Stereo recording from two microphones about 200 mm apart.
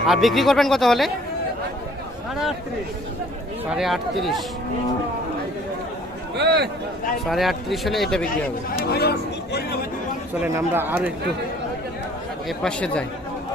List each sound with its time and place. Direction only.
0.1 s speech: centre (ahead or behind)
3.7 s speech: centre (ahead or behind)
6.3 s speech: 55° right (ahead or behind)
7.3 s speech: centre (ahead or behind)
8.9 s speech: 55° left (ahead or behind)
10.4 s speech: 10° right (ahead or behind)
12.5 s speech: 5° left (ahead or behind)